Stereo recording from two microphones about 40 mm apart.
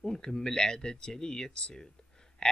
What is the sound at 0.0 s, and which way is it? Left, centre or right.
Speech, centre.